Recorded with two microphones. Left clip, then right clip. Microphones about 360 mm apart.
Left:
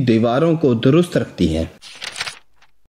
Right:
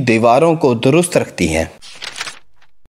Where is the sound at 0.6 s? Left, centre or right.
Centre.